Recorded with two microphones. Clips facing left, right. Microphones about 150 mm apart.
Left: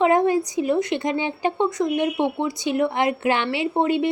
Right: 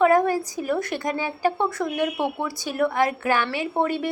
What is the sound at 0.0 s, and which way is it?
A woman's voice, 20° left (ahead or behind).